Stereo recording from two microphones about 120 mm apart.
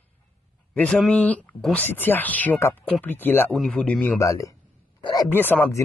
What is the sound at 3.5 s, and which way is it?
Speech, 5° left (ahead or behind).